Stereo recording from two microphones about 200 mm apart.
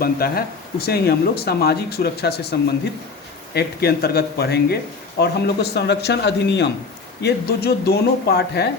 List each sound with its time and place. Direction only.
0.0 s speech: 50° left (ahead or behind)